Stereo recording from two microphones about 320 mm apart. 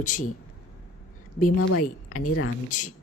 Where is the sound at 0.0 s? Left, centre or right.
Left.